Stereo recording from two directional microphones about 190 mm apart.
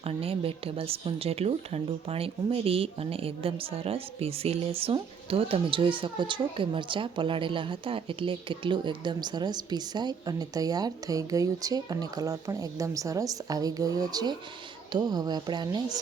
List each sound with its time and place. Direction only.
0.0 s speech: 30° right (ahead or behind)